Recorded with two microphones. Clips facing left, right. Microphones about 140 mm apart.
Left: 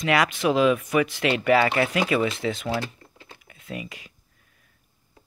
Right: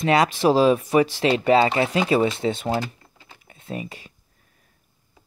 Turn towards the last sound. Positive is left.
turn(degrees=-30)  # may be behind; listen again after turning